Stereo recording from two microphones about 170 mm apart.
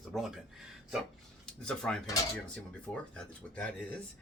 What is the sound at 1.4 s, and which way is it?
Speech, 5° left (ahead or behind).